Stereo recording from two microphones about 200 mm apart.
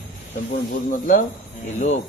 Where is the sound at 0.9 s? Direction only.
40° left (ahead or behind).